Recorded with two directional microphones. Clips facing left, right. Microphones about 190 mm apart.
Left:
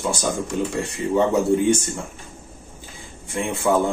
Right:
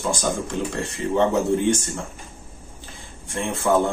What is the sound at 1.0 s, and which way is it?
Speech, 15° left (ahead or behind).